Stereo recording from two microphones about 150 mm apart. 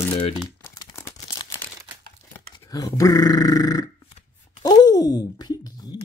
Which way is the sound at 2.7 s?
25° left (ahead or behind).